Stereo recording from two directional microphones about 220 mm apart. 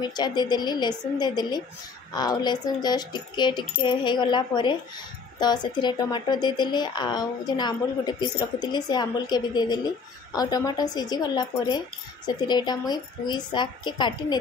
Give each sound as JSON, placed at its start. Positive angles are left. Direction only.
{"t": 0.0, "sound": "a woman's voice", "side_deg": 20}